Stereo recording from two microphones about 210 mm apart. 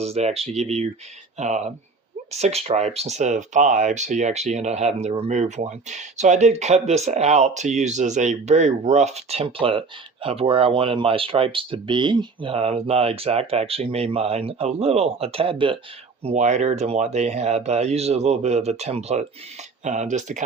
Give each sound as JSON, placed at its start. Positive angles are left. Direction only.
{"t": 0.0, "sound": "speech", "side_deg": -30}